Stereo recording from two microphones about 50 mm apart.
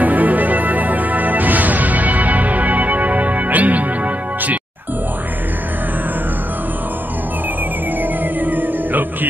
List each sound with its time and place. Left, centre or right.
0.0 s music: right
8.0 s music: right